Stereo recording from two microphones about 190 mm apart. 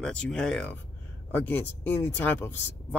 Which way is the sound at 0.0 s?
5° left (ahead or behind).